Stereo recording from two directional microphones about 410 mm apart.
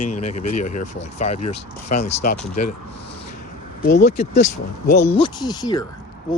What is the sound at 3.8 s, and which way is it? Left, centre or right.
Speech, left.